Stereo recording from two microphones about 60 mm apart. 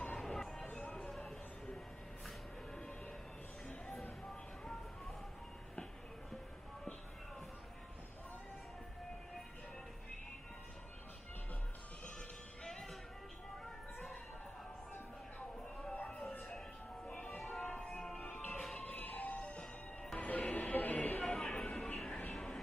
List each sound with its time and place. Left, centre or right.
0.0 s music: centre
3.6 s music: centre
4.3 s a sound: centre
12.6 s music: centre
15.8 s music: left
17.4 s music: centre
17.6 s music: centre
21.2 s a sound: centre
22.3 s vehicle: centre